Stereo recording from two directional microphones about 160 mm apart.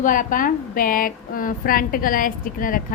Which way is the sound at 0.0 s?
55° left (ahead or behind).